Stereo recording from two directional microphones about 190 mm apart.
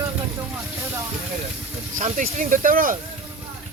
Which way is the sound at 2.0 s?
45° right (ahead or behind).